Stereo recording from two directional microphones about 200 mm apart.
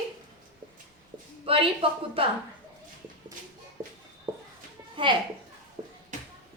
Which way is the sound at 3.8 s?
20° right (ahead or behind).